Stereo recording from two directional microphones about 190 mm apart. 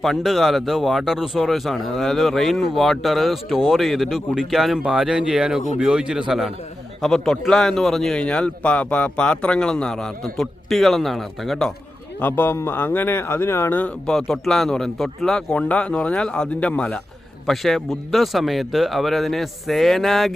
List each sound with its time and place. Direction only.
0.0 s speech: centre (ahead or behind)